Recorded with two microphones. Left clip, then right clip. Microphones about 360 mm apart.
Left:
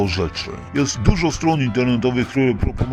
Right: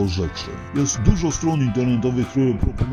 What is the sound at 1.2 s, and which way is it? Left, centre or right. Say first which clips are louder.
Speech: left 4 dB; left.